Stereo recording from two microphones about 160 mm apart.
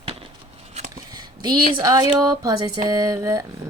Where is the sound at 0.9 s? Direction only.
25° right (ahead or behind).